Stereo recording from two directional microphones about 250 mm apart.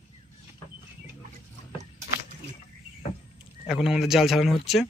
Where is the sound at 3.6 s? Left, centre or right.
Centre.